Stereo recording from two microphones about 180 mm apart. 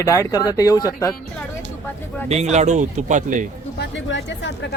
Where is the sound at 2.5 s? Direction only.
40° right (ahead or behind).